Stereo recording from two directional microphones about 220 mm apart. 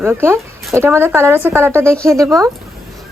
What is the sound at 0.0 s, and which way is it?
Speech, 10° right (ahead or behind).